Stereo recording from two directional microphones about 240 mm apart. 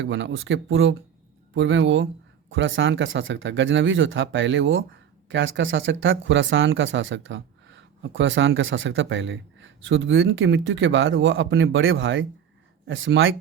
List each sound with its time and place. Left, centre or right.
0.0 s speech: right